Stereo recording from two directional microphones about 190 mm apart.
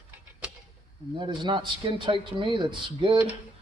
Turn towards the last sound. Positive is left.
turn(degrees=-25)  # may be behind; listen again after turning